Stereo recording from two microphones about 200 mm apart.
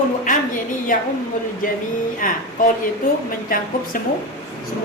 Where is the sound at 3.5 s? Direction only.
45° left (ahead or behind).